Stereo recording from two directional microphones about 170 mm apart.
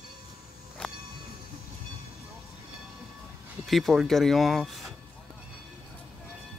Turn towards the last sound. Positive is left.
turn(degrees=0)  # may be behind; listen again after turning